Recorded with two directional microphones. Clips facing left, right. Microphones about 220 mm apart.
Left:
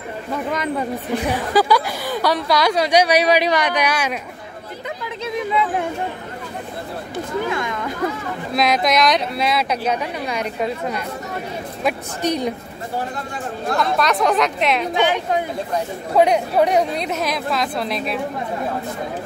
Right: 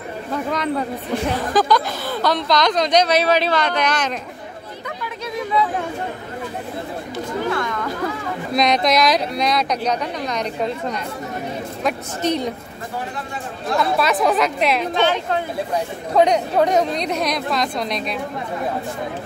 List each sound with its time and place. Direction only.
0.5 s a woman's voice: 10° left (ahead or behind)
5.2 s a sound: 20° left (ahead or behind)
7.4 s a woman's voice: 15° left (ahead or behind)
8.5 s a woman's voice: 5° left (ahead or behind)
13.7 s speech: 5° right (ahead or behind)
15.0 s a woman's voice: 15° left (ahead or behind)